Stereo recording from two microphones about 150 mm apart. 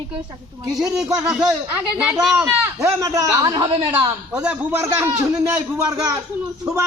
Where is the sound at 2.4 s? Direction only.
20° right (ahead or behind).